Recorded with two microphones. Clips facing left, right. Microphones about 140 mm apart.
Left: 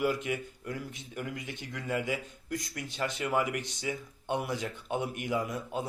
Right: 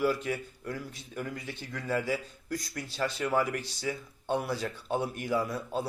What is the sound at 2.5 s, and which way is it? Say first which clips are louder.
Speech: right 1 dB; 20° left (ahead or behind).